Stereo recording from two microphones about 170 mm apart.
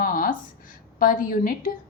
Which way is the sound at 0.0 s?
55° left (ahead or behind).